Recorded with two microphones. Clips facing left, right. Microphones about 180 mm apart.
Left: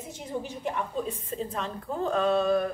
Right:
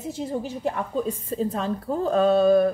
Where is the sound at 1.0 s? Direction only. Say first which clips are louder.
Right 7 dB; 35° right (ahead or behind).